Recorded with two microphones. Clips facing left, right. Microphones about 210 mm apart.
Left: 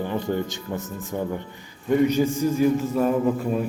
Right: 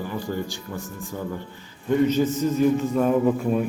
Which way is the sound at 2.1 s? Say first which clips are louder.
Even; 10° left (ahead or behind).